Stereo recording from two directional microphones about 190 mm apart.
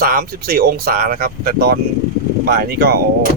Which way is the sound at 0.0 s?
50° right (ahead or behind).